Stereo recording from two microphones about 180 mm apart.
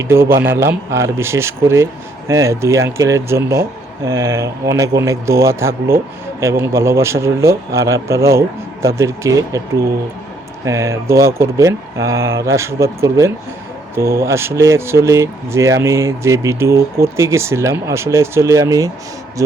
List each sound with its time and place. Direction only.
0.0 s speech: 15° right (ahead or behind)
10.7 s speech: 15° right (ahead or behind)